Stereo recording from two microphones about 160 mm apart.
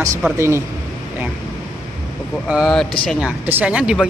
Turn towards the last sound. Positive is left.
turn(degrees=-5)  # may be behind; listen again after turning